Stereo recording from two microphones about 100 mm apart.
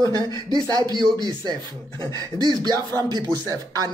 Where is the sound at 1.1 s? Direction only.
45° right (ahead or behind).